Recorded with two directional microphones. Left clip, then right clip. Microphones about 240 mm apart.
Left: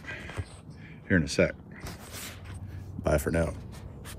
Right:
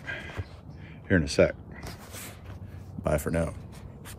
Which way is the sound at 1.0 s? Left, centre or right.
Centre.